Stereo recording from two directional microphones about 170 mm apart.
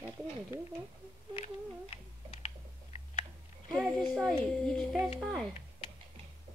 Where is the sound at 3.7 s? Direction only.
Centre (ahead or behind).